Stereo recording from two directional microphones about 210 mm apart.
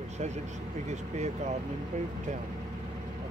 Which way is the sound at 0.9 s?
35° right (ahead or behind).